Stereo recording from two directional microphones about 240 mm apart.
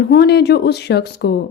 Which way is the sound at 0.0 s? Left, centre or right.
Left.